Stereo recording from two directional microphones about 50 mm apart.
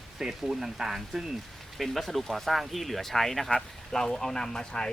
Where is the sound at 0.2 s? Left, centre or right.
Centre.